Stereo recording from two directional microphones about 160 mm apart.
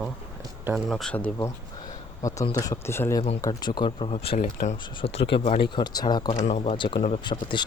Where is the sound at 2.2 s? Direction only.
20° left (ahead or behind); by 5.6 s 35° left (ahead or behind).